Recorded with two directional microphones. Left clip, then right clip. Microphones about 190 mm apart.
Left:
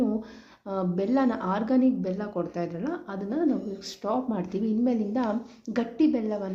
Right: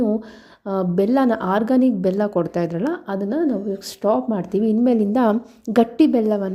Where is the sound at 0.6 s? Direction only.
35° right (ahead or behind).